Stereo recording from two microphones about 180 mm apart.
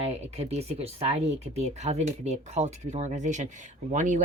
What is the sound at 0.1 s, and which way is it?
Speech, 35° right (ahead or behind).